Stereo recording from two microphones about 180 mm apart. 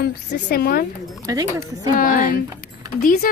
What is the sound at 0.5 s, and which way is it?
Speech, 55° left (ahead or behind).